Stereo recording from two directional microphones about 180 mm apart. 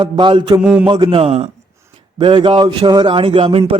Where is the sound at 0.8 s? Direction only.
25° right (ahead or behind).